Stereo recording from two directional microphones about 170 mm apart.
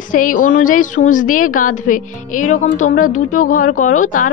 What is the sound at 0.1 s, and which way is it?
A woman's voice, 50° left (ahead or behind).